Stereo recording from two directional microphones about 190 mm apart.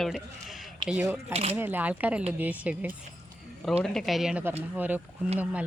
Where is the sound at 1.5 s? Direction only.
10° right (ahead or behind).